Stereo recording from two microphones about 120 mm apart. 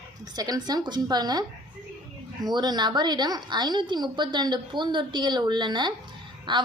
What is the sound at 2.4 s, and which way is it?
A woman's voice, 35° right (ahead or behind).